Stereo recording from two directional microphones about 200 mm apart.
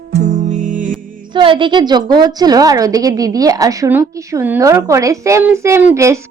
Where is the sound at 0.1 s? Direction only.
35° right (ahead or behind).